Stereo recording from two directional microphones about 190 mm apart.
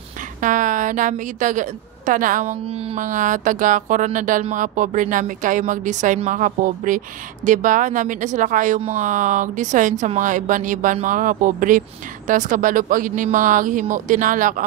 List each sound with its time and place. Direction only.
0.4 s a woman's voice: 45° right (ahead or behind)